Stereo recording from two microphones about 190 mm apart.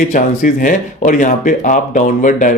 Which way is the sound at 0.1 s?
45° left (ahead or behind).